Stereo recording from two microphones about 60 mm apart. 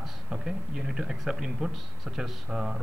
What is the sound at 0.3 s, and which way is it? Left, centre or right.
Speech, centre.